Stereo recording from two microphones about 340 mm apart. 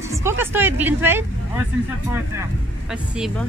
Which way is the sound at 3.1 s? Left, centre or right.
Centre.